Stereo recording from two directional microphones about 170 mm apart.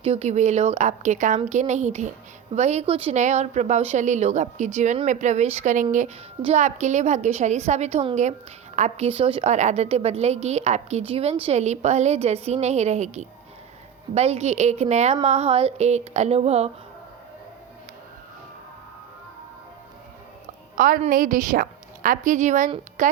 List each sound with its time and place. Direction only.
0.0 s a woman's voice: 40° right (ahead or behind)
20.7 s a woman's voice: 55° right (ahead or behind)